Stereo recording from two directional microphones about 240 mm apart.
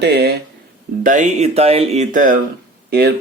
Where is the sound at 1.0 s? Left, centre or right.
Right.